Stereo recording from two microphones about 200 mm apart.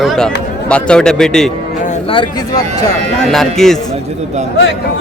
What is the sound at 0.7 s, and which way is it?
Speech, 5° left (ahead or behind).